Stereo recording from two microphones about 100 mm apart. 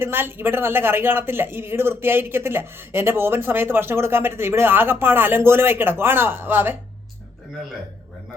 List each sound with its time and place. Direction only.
0.0 s speech: 25° right (ahead or behind)